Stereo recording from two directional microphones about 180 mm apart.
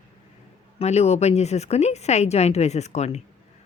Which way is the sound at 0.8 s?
35° left (ahead or behind).